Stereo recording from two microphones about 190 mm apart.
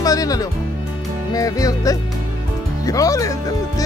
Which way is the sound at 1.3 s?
20° left (ahead or behind).